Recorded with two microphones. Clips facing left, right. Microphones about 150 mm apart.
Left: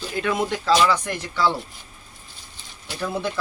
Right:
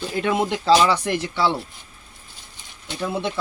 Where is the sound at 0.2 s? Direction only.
25° right (ahead or behind).